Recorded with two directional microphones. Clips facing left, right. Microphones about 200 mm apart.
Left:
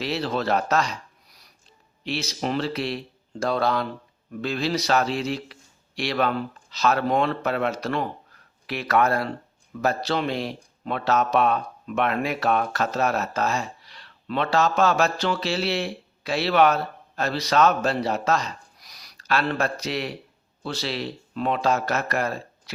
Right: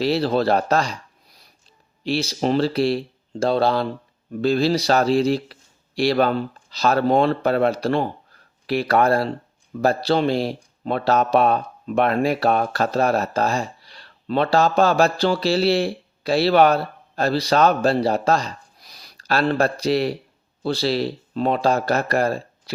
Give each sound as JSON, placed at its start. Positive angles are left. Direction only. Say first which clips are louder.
{"t": 0.0, "sound": "speech", "louder": "right 7 dB", "side_deg": -35}